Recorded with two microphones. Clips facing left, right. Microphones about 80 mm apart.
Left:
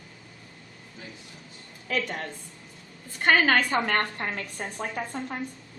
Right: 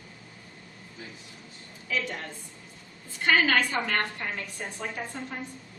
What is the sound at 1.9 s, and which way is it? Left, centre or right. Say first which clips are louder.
A woman's voice: left 2 dB; left.